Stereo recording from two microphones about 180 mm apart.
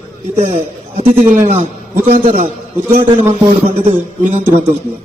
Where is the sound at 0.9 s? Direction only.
35° right (ahead or behind).